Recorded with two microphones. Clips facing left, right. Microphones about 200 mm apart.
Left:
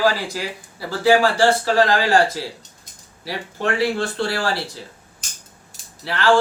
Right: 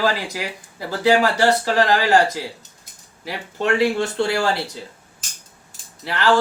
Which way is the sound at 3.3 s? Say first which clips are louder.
Right 2 dB; 20° right (ahead or behind).